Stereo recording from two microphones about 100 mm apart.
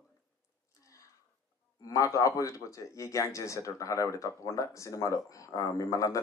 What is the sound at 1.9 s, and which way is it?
Speech, 35° left (ahead or behind).